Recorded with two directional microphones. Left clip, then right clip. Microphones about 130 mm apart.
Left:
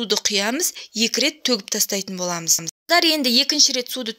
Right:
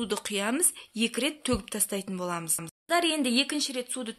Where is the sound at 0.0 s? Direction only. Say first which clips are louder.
Left 10 dB; 30° left (ahead or behind).